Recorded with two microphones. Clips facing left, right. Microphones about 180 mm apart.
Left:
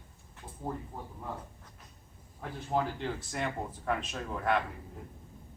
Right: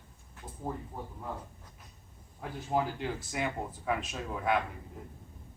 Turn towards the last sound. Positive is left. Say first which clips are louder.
# even
turn(degrees=-5)  # may be behind; listen again after turning